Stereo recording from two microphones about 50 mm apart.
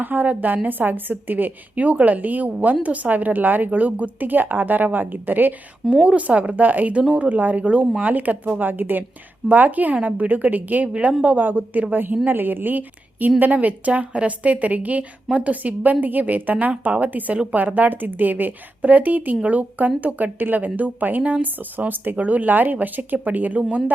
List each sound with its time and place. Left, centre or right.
0.0 s a woman's voice: right
6.1 s a woman's voice: right